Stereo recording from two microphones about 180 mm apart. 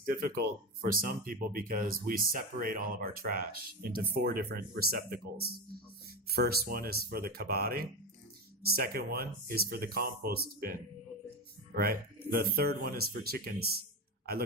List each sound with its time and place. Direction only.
0.2 s speech: 55° right (ahead or behind)